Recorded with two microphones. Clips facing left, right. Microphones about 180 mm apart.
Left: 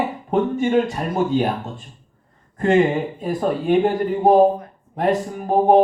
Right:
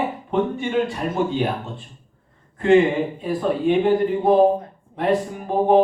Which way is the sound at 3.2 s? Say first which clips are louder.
Right 1 dB; 45° left (ahead or behind).